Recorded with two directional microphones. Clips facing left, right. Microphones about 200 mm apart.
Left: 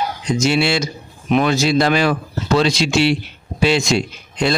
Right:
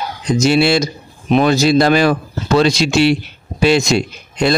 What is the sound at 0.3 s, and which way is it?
Speech, 35° right (ahead or behind).